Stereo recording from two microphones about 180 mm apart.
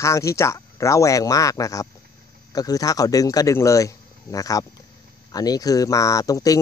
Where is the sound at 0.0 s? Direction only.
15° left (ahead or behind).